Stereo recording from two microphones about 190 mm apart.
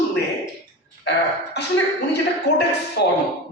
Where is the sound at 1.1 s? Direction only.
65° left (ahead or behind).